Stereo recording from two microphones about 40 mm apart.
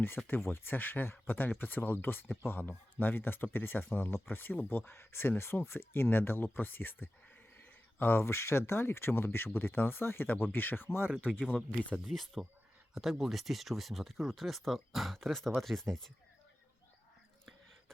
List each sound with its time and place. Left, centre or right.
0.3 s speech: left
4.9 s speech: left
10.8 s speech: left
11.5 s speech: left
12.1 s speech: centre